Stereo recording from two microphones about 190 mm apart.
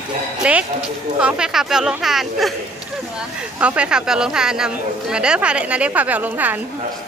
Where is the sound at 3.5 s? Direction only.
5° right (ahead or behind).